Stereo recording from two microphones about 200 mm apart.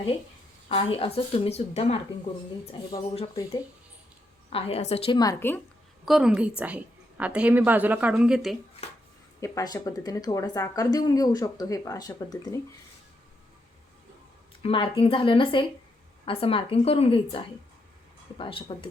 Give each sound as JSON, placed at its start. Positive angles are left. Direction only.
{"t": 0.7, "sound": "a woman's voice", "side_deg": 30}
{"t": 4.4, "sound": "a woman's voice", "side_deg": 30}
{"t": 6.1, "sound": "a woman's voice", "side_deg": -5}
{"t": 9.4, "sound": "speech", "side_deg": 15}
{"t": 14.6, "sound": "a woman's voice", "side_deg": 25}